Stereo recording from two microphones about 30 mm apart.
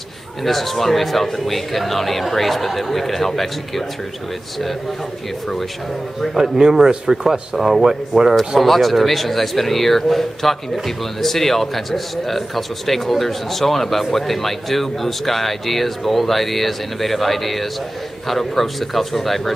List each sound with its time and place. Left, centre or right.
0.4 s a man's voice: centre
6.3 s speech: centre
7.5 s a man's voice: centre
8.5 s a man's voice: centre